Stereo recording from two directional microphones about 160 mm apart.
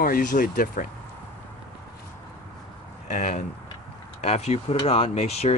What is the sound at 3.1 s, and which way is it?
Speech, 50° left (ahead or behind).